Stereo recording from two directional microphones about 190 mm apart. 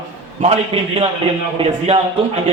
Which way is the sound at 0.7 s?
30° right (ahead or behind).